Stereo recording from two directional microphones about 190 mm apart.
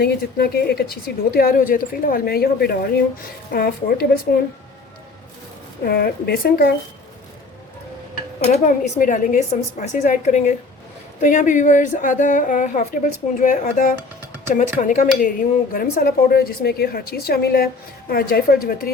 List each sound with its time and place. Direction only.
0.0 s a woman's voice: 55° left (ahead or behind)
5.8 s a woman's voice: 55° left (ahead or behind)
8.4 s a woman's voice: 40° left (ahead or behind)